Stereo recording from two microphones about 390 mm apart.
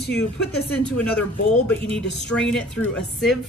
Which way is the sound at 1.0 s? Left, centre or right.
Centre.